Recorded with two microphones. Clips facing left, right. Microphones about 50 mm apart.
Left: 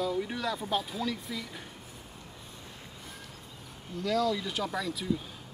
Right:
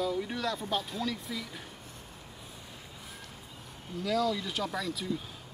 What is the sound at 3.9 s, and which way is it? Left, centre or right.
Speech, centre.